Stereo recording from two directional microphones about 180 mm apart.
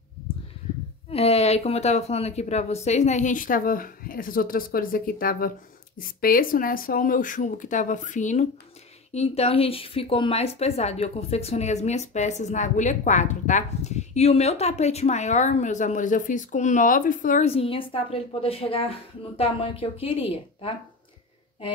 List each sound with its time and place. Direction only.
1.1 s a woman's voice: 35° left (ahead or behind)